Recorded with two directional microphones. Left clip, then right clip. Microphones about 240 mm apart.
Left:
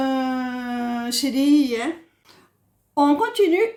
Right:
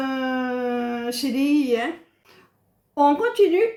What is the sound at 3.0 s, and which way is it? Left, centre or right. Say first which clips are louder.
Speech: right 1 dB; left.